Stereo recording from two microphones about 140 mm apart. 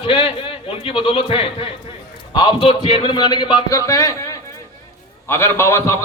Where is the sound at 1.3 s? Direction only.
40° left (ahead or behind).